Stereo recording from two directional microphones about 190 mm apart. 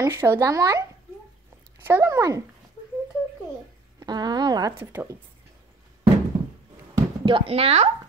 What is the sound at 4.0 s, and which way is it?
Speech, 20° right (ahead or behind).